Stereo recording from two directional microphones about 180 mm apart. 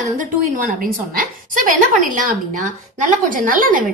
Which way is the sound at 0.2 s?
50° right (ahead or behind).